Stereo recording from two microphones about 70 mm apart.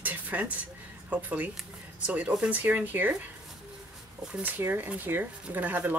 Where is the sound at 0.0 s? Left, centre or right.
Right.